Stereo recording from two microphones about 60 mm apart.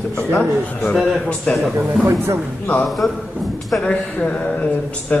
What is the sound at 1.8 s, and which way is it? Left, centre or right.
A man's voice, centre.